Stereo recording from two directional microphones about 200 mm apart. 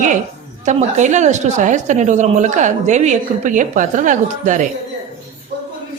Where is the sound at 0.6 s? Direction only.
35° right (ahead or behind).